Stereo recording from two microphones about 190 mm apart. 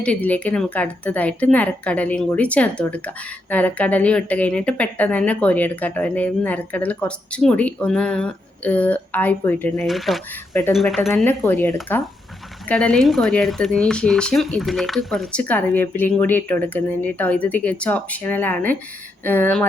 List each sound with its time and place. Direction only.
0.0 s a woman's voice: 5° left (ahead or behind)
10.5 s speech: 15° left (ahead or behind)
10.8 s speech: centre (ahead or behind)
11.1 s a woman's voice: 10° left (ahead or behind)